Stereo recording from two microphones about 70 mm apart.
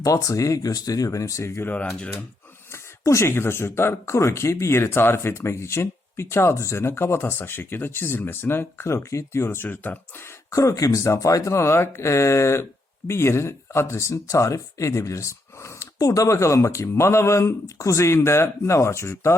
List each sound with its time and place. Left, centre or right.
0.0 s speech: left
1.6 s speech: centre
3.0 s speech: left
10.5 s speech: left
16.0 s speech: left